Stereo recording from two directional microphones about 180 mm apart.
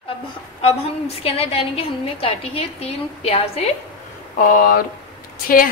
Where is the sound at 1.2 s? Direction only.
35° left (ahead or behind).